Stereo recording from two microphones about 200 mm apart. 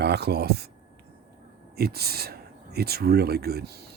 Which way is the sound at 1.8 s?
50° right (ahead or behind).